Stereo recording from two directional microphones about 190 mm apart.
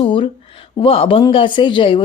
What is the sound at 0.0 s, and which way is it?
A woman's voice, 30° left (ahead or behind).